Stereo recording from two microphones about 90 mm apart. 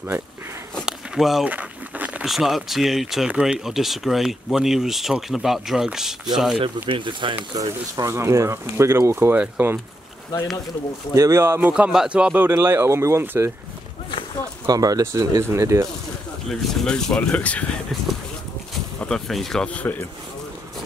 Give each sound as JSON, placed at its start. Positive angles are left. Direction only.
{"t": 0.8, "sound": "a sound", "side_deg": -5}
{"t": 1.4, "sound": "a sound", "side_deg": -15}
{"t": 2.2, "sound": "speech", "side_deg": -5}
{"t": 6.6, "sound": "speech", "side_deg": -70}
{"t": 7.9, "sound": "speech", "side_deg": -35}
{"t": 11.1, "sound": "speech", "side_deg": -35}
{"t": 11.7, "sound": "speech", "side_deg": -10}
{"t": 14.7, "sound": "speech", "side_deg": -45}
{"t": 16.4, "sound": "speech", "side_deg": 5}
{"t": 18.9, "sound": "speech", "side_deg": 5}
{"t": 19.7, "sound": "speech", "side_deg": 20}